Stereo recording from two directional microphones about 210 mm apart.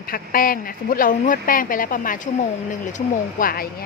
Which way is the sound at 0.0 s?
45° left (ahead or behind).